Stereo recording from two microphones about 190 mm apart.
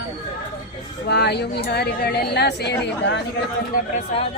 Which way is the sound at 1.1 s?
60° left (ahead or behind).